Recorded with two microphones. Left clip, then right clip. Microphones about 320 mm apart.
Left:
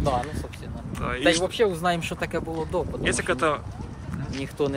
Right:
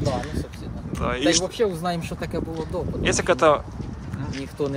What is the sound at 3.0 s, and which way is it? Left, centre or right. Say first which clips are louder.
Speech: right 7 dB; centre.